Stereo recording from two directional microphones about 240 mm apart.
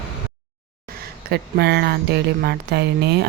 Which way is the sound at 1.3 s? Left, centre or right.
Right.